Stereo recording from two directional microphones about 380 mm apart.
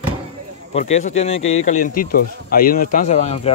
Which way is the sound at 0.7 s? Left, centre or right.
Centre.